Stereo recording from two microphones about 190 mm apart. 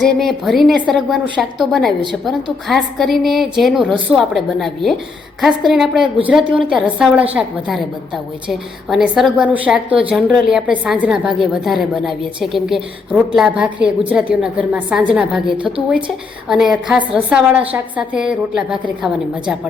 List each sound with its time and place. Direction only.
0.2 s a woman's voice: centre (ahead or behind)
16.5 s a woman's voice: centre (ahead or behind)